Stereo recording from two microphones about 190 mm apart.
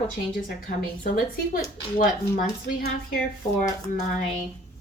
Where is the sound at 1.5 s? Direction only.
50° left (ahead or behind).